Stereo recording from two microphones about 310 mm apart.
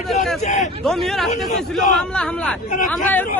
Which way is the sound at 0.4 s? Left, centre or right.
Left.